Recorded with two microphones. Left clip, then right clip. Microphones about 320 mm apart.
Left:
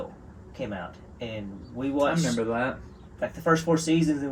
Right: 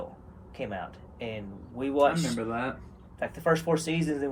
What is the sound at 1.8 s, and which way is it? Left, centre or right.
A man's voice, centre.